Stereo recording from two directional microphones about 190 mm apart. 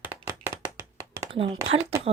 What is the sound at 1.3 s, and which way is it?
Speech, 30° right (ahead or behind).